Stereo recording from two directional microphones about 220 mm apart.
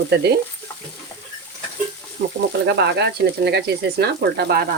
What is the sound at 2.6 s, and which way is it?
Speech, 50° right (ahead or behind).